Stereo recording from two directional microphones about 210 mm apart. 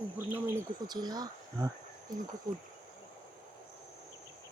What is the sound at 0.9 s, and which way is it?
Speech, 20° right (ahead or behind).